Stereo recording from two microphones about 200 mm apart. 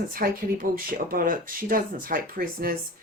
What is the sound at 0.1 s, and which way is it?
A woman's voice, 45° right (ahead or behind).